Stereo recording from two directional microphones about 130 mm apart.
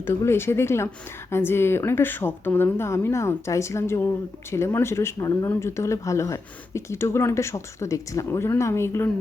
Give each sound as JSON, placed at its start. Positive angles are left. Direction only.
{"t": 0.0, "sound": "speech", "side_deg": 20}